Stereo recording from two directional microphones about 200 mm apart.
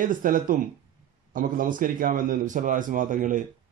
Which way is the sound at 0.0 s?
40° right (ahead or behind).